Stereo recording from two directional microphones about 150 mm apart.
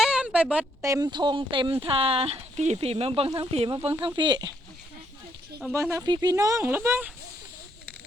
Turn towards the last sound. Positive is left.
turn(degrees=-15)  # may be behind; listen again after turning